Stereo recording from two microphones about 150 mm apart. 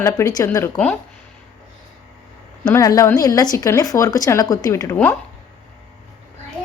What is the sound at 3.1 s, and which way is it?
Speech, 25° left (ahead or behind).